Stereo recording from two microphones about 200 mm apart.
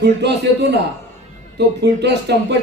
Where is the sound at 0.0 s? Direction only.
60° right (ahead or behind).